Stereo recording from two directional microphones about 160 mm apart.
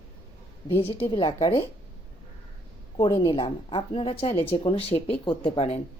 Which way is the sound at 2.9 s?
35° left (ahead or behind).